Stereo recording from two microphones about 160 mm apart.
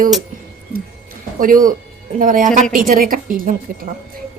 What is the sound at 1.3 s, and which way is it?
A woman's voice, 60° right (ahead or behind).